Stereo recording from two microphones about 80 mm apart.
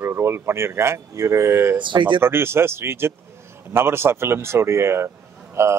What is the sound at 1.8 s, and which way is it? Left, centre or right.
Speech, right.